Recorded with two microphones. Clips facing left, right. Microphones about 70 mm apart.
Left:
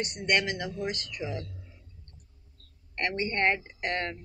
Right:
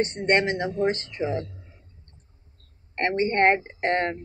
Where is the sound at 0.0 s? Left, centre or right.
Right.